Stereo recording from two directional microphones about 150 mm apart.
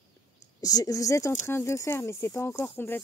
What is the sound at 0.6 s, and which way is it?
Speech, 25° left (ahead or behind).